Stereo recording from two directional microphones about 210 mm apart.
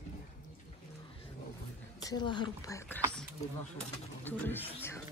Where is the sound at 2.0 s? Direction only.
20° left (ahead or behind).